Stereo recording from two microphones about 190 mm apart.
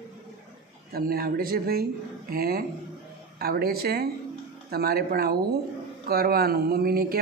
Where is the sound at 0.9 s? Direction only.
50° right (ahead or behind).